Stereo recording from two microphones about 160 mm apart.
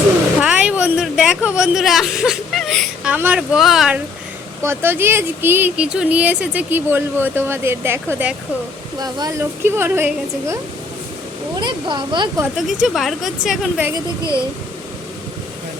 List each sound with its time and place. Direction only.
0.3 s a sound: 5° right (ahead or behind)
4.6 s speech: 15° right (ahead or behind)
9.0 s speech: 25° right (ahead or behind)
11.6 s speech: 30° right (ahead or behind)
12.8 s speech: centre (ahead or behind)